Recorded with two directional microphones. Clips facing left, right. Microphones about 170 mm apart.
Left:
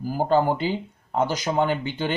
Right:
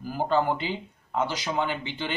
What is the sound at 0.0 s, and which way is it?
Speech, 40° left (ahead or behind).